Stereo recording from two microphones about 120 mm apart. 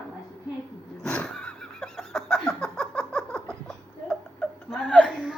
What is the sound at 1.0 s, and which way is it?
Laughter, 5° left (ahead or behind).